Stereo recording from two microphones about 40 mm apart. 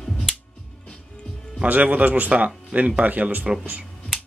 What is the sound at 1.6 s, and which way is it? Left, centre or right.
Speech, right.